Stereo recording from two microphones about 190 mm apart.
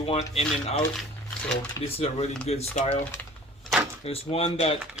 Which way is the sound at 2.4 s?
35° left (ahead or behind).